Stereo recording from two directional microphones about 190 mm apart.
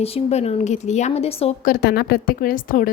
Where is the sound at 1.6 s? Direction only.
55° left (ahead or behind).